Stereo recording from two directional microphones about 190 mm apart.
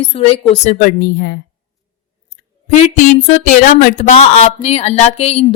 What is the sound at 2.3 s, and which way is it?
Speech, 40° left (ahead or behind).